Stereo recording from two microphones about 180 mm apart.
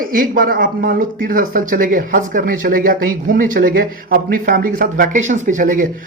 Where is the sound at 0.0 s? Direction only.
50° right (ahead or behind).